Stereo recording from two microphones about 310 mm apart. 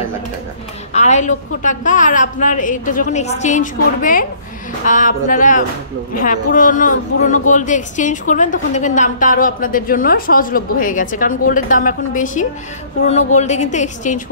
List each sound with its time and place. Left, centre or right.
0.9 s speech: left